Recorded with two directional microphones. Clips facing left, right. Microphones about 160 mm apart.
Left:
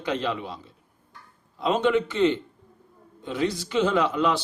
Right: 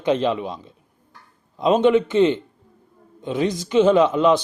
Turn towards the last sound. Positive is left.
turn(degrees=-20)  # may be behind; listen again after turning